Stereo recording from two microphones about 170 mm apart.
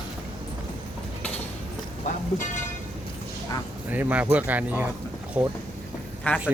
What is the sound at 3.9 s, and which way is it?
Speech, 10° right (ahead or behind).